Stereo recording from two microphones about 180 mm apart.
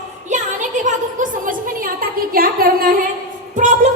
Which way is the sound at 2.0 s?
55° right (ahead or behind).